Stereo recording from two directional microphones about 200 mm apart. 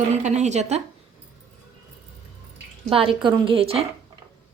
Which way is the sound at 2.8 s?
25° right (ahead or behind).